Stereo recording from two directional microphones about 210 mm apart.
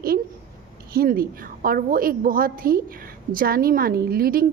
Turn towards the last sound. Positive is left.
turn(degrees=-45)  # may be behind; listen again after turning